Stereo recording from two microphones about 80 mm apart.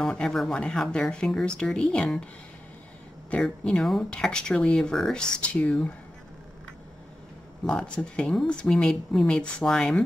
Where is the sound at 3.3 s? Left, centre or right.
Centre.